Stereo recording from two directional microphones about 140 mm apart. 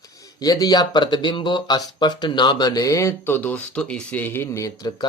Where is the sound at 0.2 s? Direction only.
25° left (ahead or behind).